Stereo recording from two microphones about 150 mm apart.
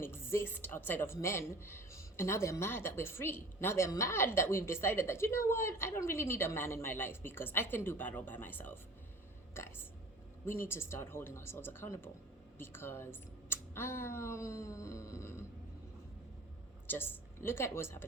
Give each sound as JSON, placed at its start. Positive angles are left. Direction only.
{"t": 0.0, "sound": "a woman's voice", "side_deg": 15}
{"t": 10.4, "sound": "a woman's voice", "side_deg": 15}
{"t": 16.8, "sound": "a woman's voice", "side_deg": 15}